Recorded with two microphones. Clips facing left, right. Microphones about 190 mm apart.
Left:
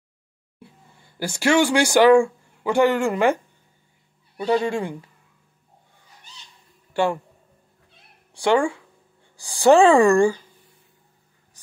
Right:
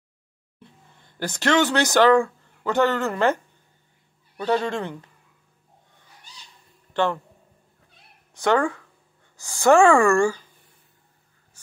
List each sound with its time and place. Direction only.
0.6 s speech: 10° left (ahead or behind)
4.4 s speech: 10° left (ahead or behind)
6.9 s a sound: 10° left (ahead or behind)
8.5 s speech: 10° left (ahead or behind)